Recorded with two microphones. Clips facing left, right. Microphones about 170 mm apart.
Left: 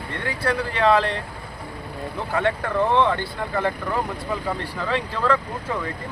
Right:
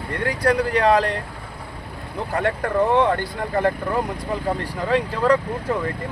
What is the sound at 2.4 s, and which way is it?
Speech, 45° right (ahead or behind).